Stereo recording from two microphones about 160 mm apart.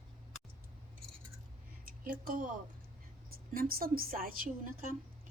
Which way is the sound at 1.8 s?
60° right (ahead or behind).